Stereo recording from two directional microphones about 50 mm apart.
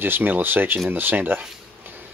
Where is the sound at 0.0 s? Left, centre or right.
Right.